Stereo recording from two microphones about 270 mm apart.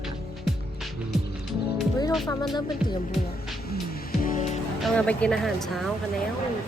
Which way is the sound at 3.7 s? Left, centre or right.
Left.